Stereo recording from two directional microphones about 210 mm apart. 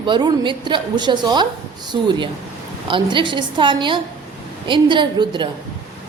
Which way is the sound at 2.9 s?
25° right (ahead or behind).